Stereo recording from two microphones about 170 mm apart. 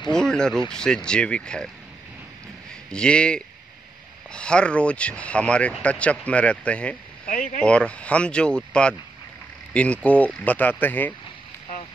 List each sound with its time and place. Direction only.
0.1 s speech: 5° left (ahead or behind)
2.9 s speech: 5° left (ahead or behind)
7.2 s speech: 55° left (ahead or behind)
7.6 s speech: 5° left (ahead or behind)